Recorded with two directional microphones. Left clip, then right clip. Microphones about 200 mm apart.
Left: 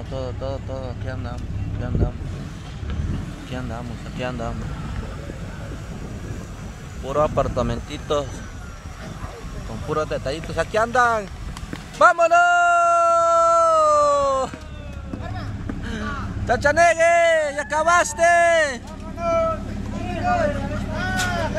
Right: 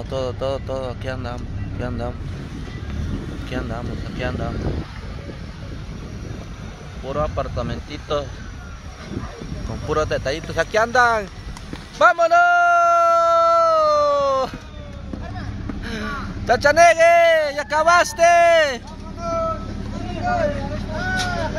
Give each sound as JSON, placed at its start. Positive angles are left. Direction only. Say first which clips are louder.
{"t": 0.1, "sound": "speech", "louder": "right 6 dB", "side_deg": -20}
{"t": 3.4, "sound": "speech", "louder": "right 4 dB", "side_deg": -15}
{"t": 4.2, "sound": "speech", "louder": "right 1 dB", "side_deg": -5}
{"t": 7.1, "sound": "speech", "louder": "left 4 dB", "side_deg": 20}
{"t": 9.8, "sound": "speech", "louder": "right 3 dB", "side_deg": -10}
{"t": 12.0, "sound": "a sound", "louder": "right 1 dB", "side_deg": 5}
{"t": 15.8, "sound": "speech", "louder": "right 2 dB", "side_deg": -5}
{"t": 19.1, "sound": "a sound", "louder": "left 3 dB", "side_deg": 10}
{"t": 20.9, "sound": "vehicle", "louder": "right 2 dB", "side_deg": -25}